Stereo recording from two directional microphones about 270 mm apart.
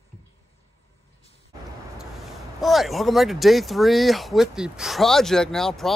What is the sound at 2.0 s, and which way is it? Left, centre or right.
Speech, centre.